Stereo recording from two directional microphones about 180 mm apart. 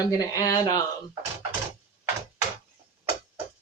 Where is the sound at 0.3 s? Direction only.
20° left (ahead or behind).